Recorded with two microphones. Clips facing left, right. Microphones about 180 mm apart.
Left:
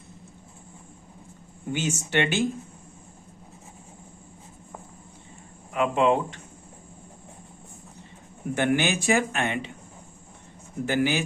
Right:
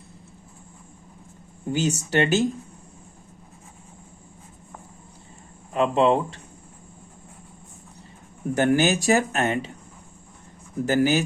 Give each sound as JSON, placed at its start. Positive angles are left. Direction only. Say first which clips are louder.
{"t": 1.7, "sound": "speech", "louder": "right 3 dB", "side_deg": -35}
{"t": 5.7, "sound": "speech", "louder": "right 2 dB", "side_deg": -35}
{"t": 8.5, "sound": "speech", "louder": "right 4 dB", "side_deg": -40}
{"t": 10.8, "sound": "speech", "louder": "right 4 dB", "side_deg": -40}